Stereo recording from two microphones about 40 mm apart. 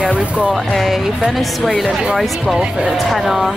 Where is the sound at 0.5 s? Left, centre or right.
Centre.